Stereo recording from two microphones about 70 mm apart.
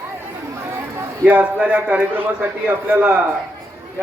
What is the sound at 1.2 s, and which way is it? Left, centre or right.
A man's voice, centre.